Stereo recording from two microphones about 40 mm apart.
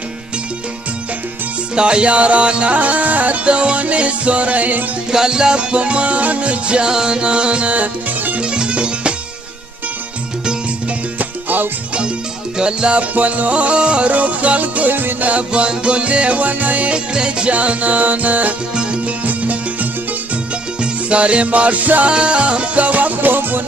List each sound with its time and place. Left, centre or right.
1.8 s music: right
2.8 s music: right
3.4 s music: right
5.1 s music: centre
6.9 s music: centre; by 8.4 s right
8.4 s music: right
11.1 s music: right
12.5 s music: right
13.1 s music: right
15.2 s music: right
16.9 s music: right
20.8 s music: right
22.0 s music: right